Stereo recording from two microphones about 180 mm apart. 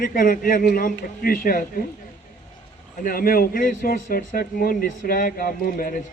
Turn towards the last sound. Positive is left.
turn(degrees=50)  # may be behind; listen again after turning